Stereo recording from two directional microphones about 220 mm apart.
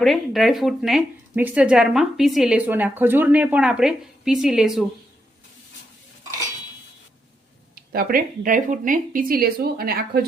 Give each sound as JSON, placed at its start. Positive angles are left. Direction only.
{"t": 0.0, "sound": "speech", "side_deg": 0}
{"t": 7.8, "sound": "speech", "side_deg": -40}